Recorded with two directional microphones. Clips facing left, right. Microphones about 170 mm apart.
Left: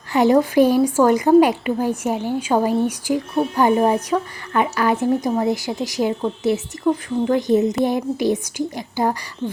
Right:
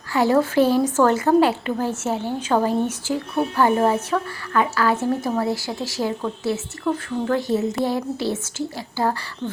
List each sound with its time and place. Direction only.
0.1 s a woman's voice: 20° left (ahead or behind)